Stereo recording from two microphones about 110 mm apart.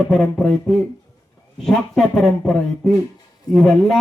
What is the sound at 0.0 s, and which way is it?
A man's voice, 5° left (ahead or behind).